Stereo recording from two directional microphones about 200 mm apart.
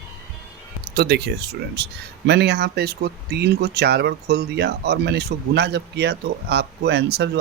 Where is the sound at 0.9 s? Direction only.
55° right (ahead or behind).